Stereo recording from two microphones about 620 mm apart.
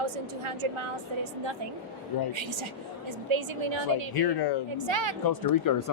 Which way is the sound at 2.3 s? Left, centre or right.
Right.